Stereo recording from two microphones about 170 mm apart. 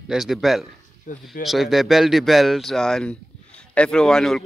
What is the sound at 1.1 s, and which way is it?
Speech, 50° left (ahead or behind).